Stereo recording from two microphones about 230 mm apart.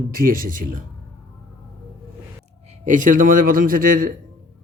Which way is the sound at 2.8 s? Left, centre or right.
Right.